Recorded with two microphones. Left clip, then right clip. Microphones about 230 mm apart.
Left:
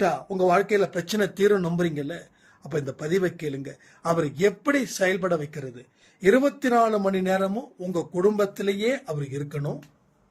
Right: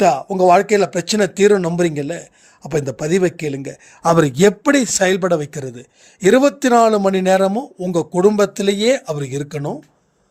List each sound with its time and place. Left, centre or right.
0.0 s speech: right